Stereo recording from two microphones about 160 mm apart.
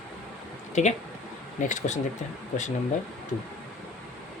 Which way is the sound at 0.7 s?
45° left (ahead or behind).